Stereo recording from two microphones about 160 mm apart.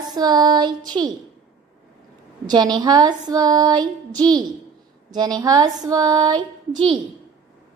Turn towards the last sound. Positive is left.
turn(degrees=-30)  # may be behind; listen again after turning